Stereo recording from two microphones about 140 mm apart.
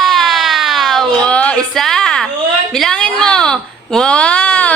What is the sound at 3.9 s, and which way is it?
Speech, 5° left (ahead or behind).